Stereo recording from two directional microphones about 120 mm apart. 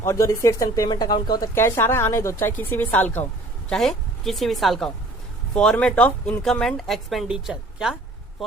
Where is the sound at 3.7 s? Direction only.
5° left (ahead or behind).